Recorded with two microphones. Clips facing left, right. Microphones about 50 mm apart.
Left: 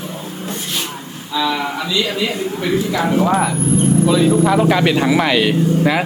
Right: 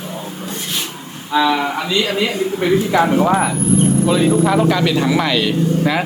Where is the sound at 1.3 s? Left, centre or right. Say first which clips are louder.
Right 4 dB; right.